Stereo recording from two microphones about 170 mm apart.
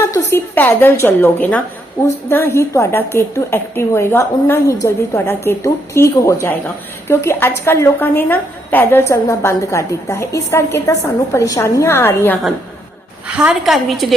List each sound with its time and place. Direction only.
0.1 s a woman's voice: 15° left (ahead or behind)
13.2 s a woman's voice: 5° right (ahead or behind)